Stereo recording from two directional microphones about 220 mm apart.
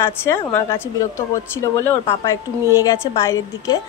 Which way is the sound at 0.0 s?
10° left (ahead or behind).